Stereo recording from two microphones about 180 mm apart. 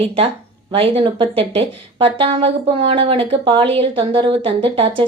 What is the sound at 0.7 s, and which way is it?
Speech, 30° right (ahead or behind).